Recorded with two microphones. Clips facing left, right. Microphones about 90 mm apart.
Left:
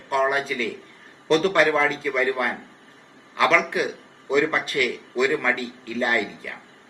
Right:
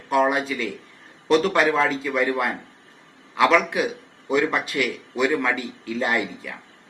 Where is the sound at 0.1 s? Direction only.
10° right (ahead or behind).